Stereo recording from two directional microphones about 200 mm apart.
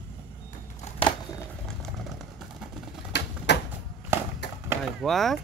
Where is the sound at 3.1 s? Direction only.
60° left (ahead or behind).